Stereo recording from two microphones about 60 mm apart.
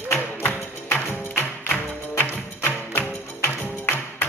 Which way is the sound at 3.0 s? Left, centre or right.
Left.